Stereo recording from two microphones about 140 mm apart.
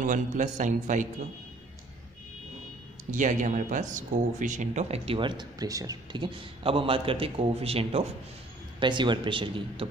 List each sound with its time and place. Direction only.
0.0 s a man's voice: 65° right (ahead or behind)
3.1 s speech: 65° right (ahead or behind); by 8.1 s 45° right (ahead or behind)
8.7 s speech: 35° right (ahead or behind)